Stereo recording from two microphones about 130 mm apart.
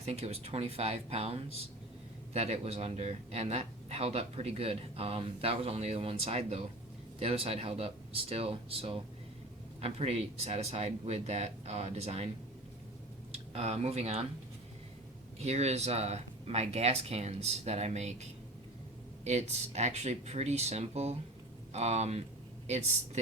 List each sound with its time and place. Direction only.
0.0 s speech: 55° right (ahead or behind)
13.3 s speech: 50° right (ahead or behind)
15.4 s speech: 55° right (ahead or behind)